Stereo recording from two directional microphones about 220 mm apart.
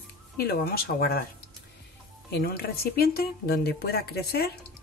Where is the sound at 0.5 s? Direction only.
45° left (ahead or behind).